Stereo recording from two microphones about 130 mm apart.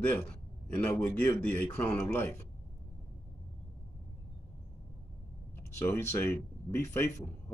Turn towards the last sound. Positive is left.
turn(degrees=20)  # may be behind; listen again after turning